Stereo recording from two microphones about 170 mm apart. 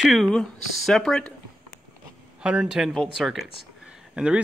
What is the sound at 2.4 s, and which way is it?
Speech, 5° right (ahead or behind).